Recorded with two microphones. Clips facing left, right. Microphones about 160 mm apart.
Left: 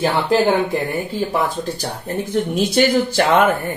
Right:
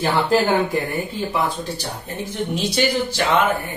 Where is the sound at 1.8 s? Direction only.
50° left (ahead or behind).